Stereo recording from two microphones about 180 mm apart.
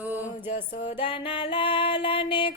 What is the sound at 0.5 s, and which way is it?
Music, 30° left (ahead or behind).